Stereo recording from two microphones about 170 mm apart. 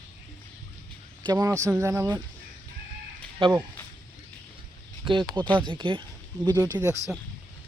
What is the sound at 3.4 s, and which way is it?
Speech, 30° right (ahead or behind).